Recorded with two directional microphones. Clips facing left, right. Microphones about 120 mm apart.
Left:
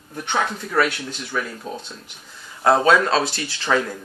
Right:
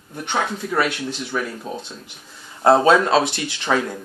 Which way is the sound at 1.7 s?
20° right (ahead or behind).